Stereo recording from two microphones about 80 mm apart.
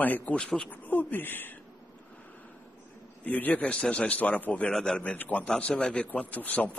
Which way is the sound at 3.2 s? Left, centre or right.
Centre.